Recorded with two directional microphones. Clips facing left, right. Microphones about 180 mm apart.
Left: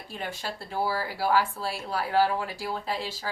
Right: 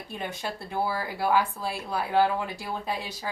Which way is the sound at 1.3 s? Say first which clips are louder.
Even; 15° right (ahead or behind).